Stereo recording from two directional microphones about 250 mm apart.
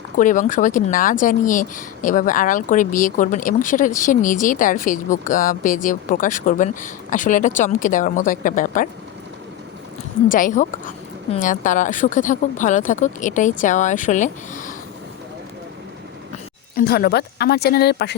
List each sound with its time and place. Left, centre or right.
0.2 s speech: left
10.2 s speech: left
16.7 s speech: left